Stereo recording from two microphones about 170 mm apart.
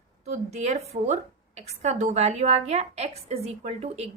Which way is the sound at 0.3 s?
40° right (ahead or behind).